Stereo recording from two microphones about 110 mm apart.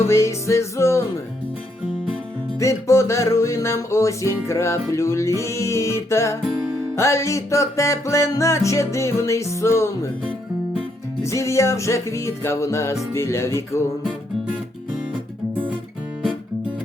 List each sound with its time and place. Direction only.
0.1 s music: 25° left (ahead or behind)
2.6 s music: 30° left (ahead or behind)
11.2 s music: 25° left (ahead or behind)